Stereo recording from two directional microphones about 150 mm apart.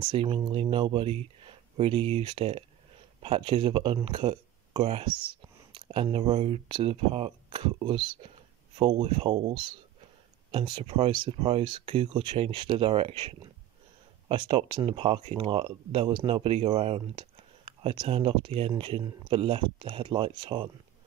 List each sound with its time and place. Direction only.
0.1 s speech: 35° right (ahead or behind)
5.3 s whispering: 35° right (ahead or behind)
6.1 s speech: 40° right (ahead or behind)